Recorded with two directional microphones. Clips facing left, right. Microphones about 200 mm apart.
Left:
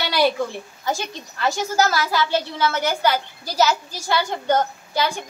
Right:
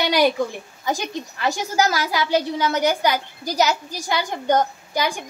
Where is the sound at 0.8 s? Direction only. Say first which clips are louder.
Right 2 dB; 15° right (ahead or behind).